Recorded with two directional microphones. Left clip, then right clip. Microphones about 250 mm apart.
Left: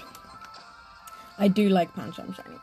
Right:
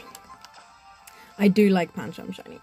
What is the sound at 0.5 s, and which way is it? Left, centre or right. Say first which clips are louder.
Speech: left 2 dB; centre.